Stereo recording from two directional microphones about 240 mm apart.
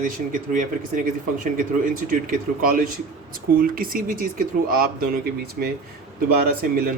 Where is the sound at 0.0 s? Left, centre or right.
Right.